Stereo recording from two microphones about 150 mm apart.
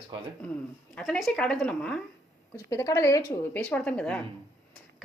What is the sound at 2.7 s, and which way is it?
A woman's voice, 20° left (ahead or behind).